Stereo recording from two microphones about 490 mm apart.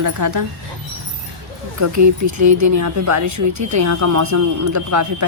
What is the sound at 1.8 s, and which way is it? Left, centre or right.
Speech, right.